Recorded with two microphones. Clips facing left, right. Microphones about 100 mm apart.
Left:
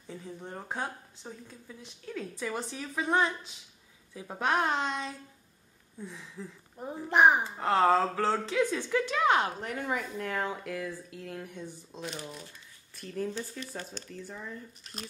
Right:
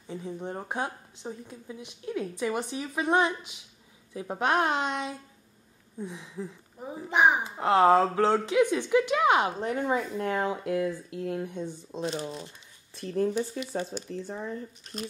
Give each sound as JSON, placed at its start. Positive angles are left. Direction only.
{"t": 0.1, "sound": "speech", "side_deg": -20}
{"t": 6.8, "sound": "a child's voice", "side_deg": 0}
{"t": 7.4, "sound": "speech", "side_deg": -15}
{"t": 14.1, "sound": "speech", "side_deg": -30}
{"t": 14.8, "sound": "a child's voice", "side_deg": 0}